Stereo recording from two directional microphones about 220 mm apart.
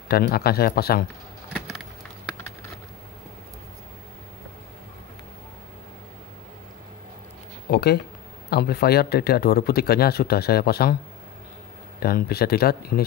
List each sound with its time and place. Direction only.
0.1 s speech: 45° left (ahead or behind)
7.7 s speech: 45° left (ahead or behind)
12.0 s speech: 45° left (ahead or behind)